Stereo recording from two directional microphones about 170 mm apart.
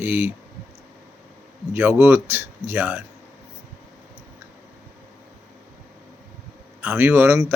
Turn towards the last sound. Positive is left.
turn(degrees=-15)  # may be behind; listen again after turning